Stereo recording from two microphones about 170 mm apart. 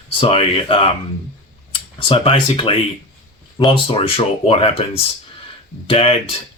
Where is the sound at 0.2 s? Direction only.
35° left (ahead or behind).